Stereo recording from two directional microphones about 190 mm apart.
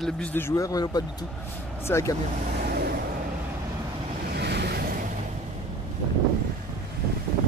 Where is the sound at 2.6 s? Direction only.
55° right (ahead or behind).